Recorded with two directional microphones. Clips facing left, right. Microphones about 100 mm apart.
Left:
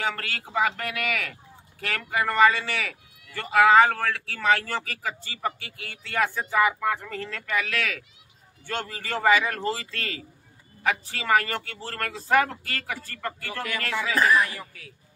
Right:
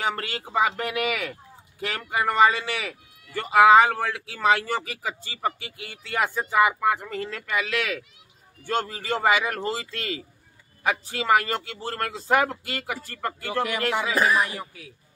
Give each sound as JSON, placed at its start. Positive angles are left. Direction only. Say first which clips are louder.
{"t": 0.0, "sound": "a man's voice", "louder": "right 2 dB", "side_deg": -20}